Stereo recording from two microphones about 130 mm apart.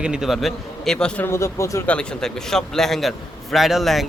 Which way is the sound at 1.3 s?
20° left (ahead or behind).